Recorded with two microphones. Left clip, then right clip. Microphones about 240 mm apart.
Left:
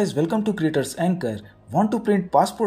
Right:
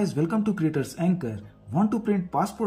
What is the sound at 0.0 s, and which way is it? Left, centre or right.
Speech, centre.